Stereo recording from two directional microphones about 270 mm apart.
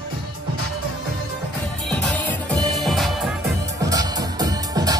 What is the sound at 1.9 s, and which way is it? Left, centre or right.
Music, centre.